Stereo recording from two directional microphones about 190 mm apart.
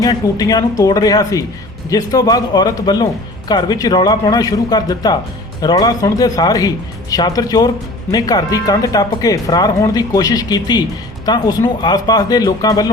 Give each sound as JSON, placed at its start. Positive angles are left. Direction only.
{"t": 0.0, "sound": "speech", "side_deg": 20}